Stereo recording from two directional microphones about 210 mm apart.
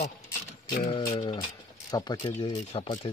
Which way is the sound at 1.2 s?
20° left (ahead or behind).